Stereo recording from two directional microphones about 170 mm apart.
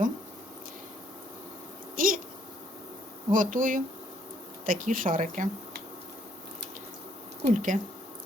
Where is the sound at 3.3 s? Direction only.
50° right (ahead or behind).